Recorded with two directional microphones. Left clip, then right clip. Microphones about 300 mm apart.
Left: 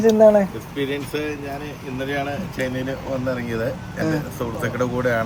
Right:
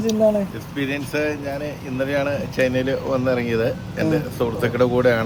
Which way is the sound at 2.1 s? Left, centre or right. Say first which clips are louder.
Right 6 dB; centre.